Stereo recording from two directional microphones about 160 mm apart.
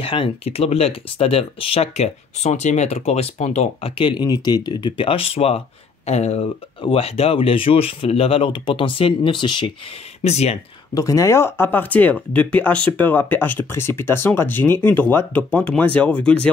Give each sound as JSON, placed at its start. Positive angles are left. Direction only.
{"t": 0.0, "sound": "speech", "side_deg": 35}
{"t": 10.2, "sound": "speech", "side_deg": 40}
{"t": 11.0, "sound": "speech", "side_deg": 20}